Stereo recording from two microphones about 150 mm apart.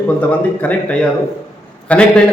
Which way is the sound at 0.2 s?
10° left (ahead or behind).